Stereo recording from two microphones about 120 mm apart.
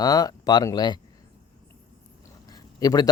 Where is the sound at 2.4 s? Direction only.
35° left (ahead or behind).